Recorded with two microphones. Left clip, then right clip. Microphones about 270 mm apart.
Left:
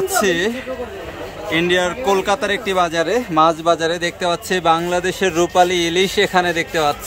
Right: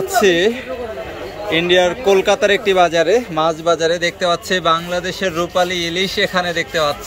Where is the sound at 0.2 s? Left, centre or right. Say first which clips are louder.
Right 8 dB; centre.